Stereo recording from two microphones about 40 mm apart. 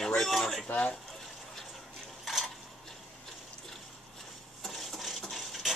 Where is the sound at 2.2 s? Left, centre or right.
Centre.